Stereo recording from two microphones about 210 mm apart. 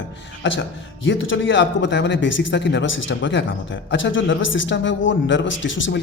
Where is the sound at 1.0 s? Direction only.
65° left (ahead or behind).